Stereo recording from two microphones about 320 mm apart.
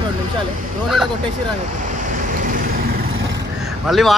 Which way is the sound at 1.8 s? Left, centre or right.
Right.